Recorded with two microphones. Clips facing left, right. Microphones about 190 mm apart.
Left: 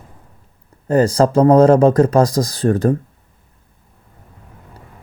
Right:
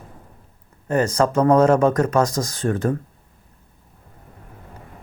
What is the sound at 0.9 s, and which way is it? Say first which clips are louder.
A man's voice: left 5 dB; 35° left (ahead or behind).